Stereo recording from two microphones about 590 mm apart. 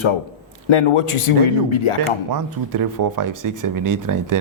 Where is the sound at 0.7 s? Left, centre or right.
Left.